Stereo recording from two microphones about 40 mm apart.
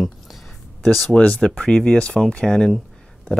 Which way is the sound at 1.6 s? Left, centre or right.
Centre.